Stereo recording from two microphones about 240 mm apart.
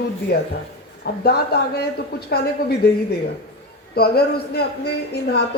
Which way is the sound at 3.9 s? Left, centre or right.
Left.